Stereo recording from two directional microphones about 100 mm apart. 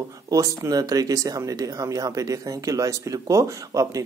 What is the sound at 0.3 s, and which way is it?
Speech, 35° right (ahead or behind).